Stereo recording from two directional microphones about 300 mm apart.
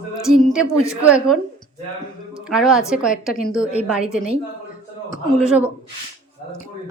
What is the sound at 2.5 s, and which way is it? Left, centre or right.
Speech, centre.